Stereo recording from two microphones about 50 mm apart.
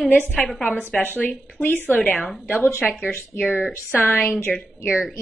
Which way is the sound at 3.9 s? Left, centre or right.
Left.